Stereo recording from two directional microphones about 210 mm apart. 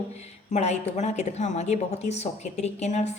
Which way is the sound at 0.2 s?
30° left (ahead or behind).